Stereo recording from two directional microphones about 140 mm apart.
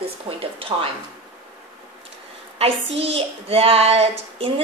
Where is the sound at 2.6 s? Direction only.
45° right (ahead or behind).